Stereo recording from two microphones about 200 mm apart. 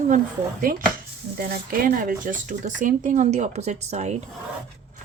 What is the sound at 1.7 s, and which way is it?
Speech, 45° right (ahead or behind).